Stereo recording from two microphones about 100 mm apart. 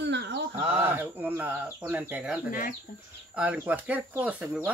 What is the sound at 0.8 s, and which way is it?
Speech, 20° right (ahead or behind).